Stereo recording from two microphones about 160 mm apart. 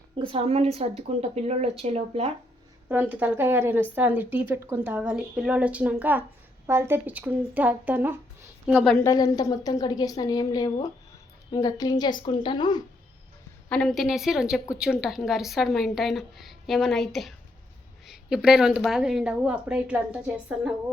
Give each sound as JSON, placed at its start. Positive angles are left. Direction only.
{"t": 0.2, "sound": "a woman's voice", "side_deg": -35}
{"t": 2.9, "sound": "a woman's voice", "side_deg": -10}
{"t": 9.0, "sound": "a woman's voice", "side_deg": 25}
{"t": 13.7, "sound": "a woman's voice", "side_deg": 5}